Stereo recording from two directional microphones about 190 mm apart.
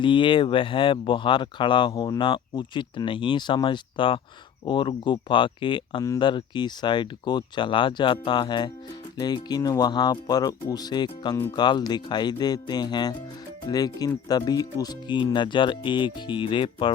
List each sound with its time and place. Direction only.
0.0 s speech: 25° left (ahead or behind)